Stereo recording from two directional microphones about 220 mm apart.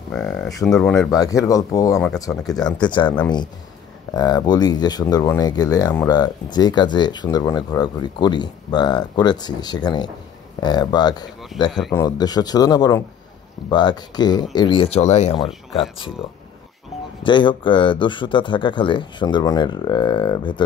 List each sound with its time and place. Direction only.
0.1 s speech: 5° left (ahead or behind)
1.1 s speech: 15° left (ahead or behind)
4.1 s speech: 20° left (ahead or behind)
17.2 s speech: 20° left (ahead or behind)